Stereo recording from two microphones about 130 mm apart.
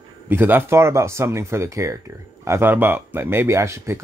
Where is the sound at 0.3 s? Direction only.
15° right (ahead or behind).